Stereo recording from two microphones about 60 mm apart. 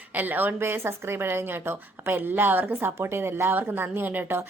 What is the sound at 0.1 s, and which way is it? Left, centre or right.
A woman's voice, right.